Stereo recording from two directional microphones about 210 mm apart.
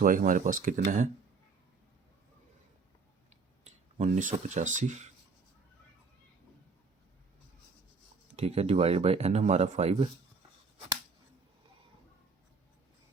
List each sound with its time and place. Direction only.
0.0 s speech: 40° right (ahead or behind)
3.6 s speech: 35° right (ahead or behind)
8.4 s speech: 30° right (ahead or behind)